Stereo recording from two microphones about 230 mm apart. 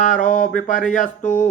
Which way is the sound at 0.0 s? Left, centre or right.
Left.